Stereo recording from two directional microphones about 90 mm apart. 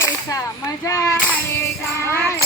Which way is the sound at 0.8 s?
35° left (ahead or behind).